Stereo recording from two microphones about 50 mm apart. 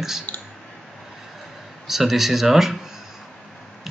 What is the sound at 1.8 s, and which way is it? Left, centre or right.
Speech, centre.